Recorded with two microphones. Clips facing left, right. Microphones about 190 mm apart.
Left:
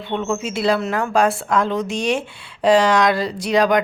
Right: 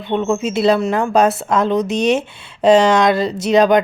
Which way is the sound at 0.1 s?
20° right (ahead or behind).